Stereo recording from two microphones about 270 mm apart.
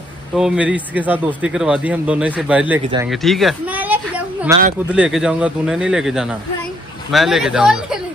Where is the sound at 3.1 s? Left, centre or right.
Centre.